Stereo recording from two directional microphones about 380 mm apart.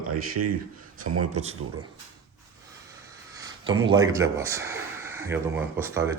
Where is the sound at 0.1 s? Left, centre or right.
Right.